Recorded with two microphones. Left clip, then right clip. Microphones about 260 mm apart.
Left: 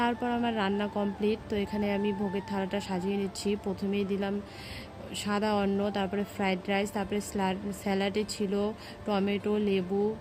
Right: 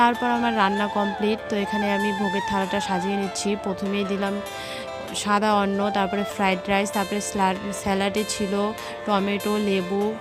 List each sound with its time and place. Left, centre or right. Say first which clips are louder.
0.0 s speech: right 9 dB; right